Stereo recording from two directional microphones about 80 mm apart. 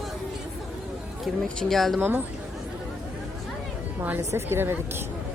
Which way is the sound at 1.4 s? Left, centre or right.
Centre.